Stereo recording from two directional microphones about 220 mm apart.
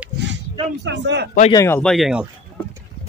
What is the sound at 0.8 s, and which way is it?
Speech, 50° right (ahead or behind).